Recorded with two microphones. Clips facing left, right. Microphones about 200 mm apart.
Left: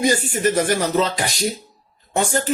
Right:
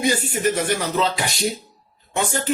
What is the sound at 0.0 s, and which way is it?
Speech, 40° left (ahead or behind).